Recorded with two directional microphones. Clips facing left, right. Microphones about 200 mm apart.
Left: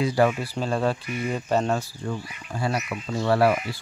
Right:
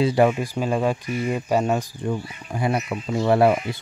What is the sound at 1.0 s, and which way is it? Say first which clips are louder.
Speech: right 4 dB; 30° right (ahead or behind).